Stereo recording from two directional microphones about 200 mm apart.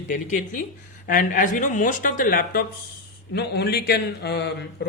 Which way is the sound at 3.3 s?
55° left (ahead or behind).